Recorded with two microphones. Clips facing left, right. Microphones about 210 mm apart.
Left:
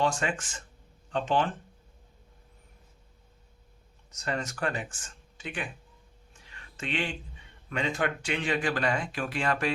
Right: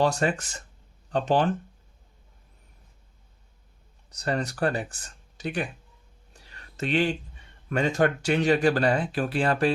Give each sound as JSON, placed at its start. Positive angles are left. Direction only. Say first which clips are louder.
{"t": 0.0, "sound": "speech", "louder": "right 5 dB", "side_deg": -35}
{"t": 4.1, "sound": "speech", "louder": "right 5 dB", "side_deg": -35}
{"t": 6.3, "sound": "a sound", "louder": "right 3 dB", "side_deg": -40}
{"t": 7.7, "sound": "speech", "louder": "right 7 dB", "side_deg": -45}